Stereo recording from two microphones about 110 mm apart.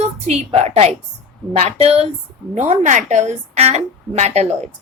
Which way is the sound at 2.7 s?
90° right.